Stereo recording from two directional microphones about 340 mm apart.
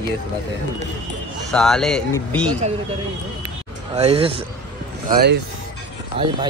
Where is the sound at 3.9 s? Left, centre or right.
Centre.